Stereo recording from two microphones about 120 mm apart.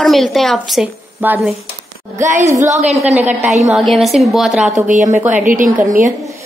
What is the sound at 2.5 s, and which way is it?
Speech, 80° right.